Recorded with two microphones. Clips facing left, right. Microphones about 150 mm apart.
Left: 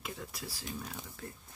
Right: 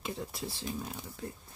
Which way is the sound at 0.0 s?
25° right (ahead or behind).